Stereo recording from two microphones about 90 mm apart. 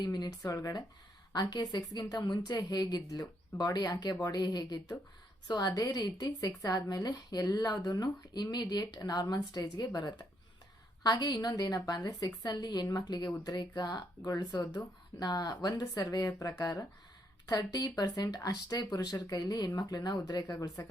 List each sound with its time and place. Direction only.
0.0 s speech: 50° left (ahead or behind)